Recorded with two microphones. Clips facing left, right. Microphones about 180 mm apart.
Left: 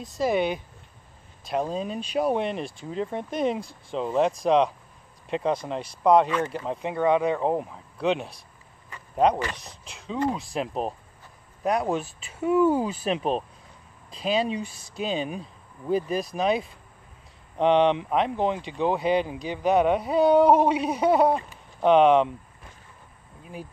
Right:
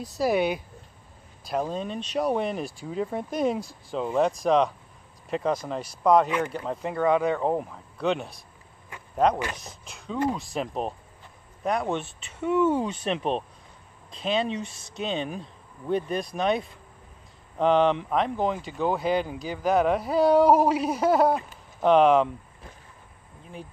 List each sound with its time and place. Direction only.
0.0 s speech: 5° right (ahead or behind)
6.0 s speech: centre (ahead or behind)